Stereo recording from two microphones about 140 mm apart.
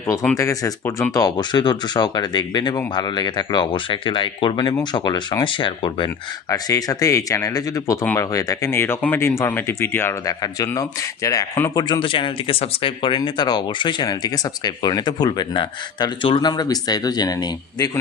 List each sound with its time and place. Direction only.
0.3 s speech: 20° left (ahead or behind)
6.5 s speech: 25° left (ahead or behind)
11.8 s speech: 35° left (ahead or behind)